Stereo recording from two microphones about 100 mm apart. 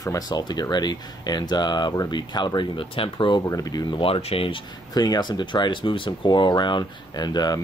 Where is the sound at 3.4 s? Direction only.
35° left (ahead or behind).